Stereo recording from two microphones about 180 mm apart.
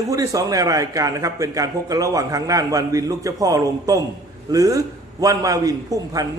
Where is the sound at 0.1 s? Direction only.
20° right (ahead or behind).